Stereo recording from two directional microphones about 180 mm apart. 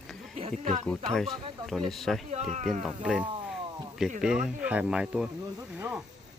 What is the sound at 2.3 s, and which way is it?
Speech, 40° right (ahead or behind).